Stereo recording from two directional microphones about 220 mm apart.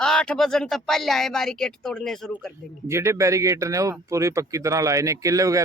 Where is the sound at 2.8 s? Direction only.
10° right (ahead or behind).